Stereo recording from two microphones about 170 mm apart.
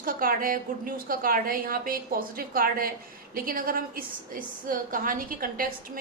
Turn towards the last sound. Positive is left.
turn(degrees=-55)  # may be behind; listen again after turning